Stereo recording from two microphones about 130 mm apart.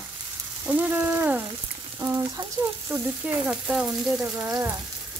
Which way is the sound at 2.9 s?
20° right (ahead or behind).